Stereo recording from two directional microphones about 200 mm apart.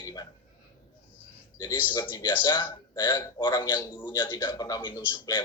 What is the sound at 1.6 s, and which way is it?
A man's voice, 20° left (ahead or behind).